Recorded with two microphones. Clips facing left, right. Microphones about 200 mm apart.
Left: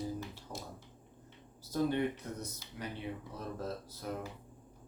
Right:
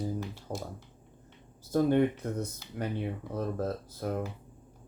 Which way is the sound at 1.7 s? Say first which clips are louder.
Right 7 dB; 50° right (ahead or behind).